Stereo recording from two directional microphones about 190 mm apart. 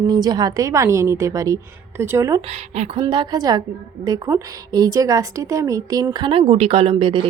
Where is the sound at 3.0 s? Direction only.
25° right (ahead or behind).